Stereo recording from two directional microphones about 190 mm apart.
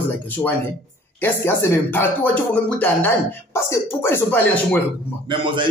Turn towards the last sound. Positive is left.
turn(degrees=-25)  # may be behind; listen again after turning